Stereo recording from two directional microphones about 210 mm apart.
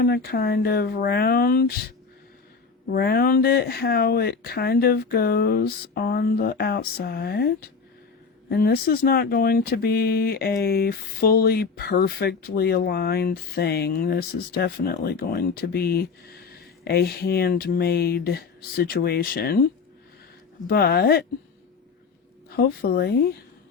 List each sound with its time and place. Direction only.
0.0 s speech: 50° left (ahead or behind)
2.9 s speech: 50° left (ahead or behind)
20.7 s speech: 50° left (ahead or behind)
22.4 s speech: 50° left (ahead or behind)